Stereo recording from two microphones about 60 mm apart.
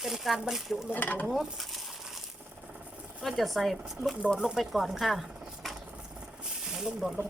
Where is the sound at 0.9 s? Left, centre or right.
Left.